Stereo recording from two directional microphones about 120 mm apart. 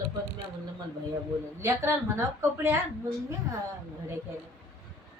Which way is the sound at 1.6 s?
25° right (ahead or behind).